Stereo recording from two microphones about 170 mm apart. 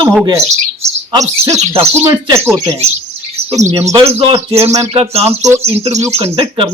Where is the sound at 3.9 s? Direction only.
30° right (ahead or behind).